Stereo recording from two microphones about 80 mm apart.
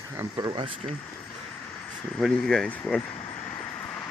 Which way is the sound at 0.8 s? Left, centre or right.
Right.